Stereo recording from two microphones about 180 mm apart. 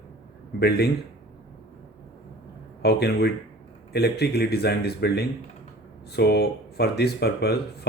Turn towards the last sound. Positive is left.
turn(degrees=65)  # may be behind; listen again after turning